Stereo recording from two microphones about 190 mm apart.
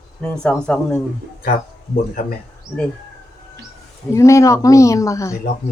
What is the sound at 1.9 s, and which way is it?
Speech, 45° left (ahead or behind).